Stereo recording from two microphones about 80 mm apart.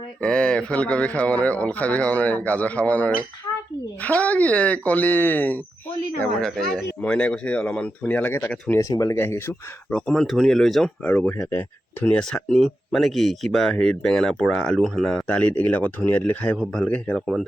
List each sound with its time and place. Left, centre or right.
0.2 s speech: centre
6.4 s speech: centre; by 8.5 s left
8.8 s speech: left
9.1 s speech: left
9.9 s speech: centre
11.0 s speech: centre
11.5 s speech: left
12.1 s speech: centre